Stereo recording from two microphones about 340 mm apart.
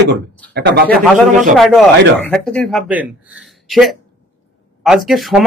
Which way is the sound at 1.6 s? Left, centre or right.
Centre.